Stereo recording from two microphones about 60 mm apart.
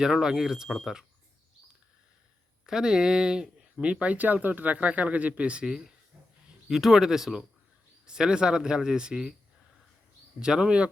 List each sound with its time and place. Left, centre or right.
0.0 s speech: centre
2.6 s speech: centre
5.6 s speech: centre
10.4 s speech: centre